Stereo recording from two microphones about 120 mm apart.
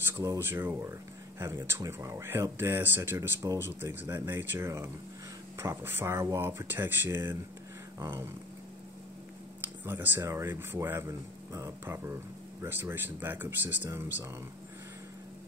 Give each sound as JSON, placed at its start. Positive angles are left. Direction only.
{"t": 0.0, "sound": "speech", "side_deg": -20}
{"t": 9.8, "sound": "speech", "side_deg": -15}